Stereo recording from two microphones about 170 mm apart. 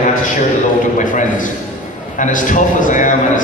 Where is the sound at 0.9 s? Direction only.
50° left (ahead or behind).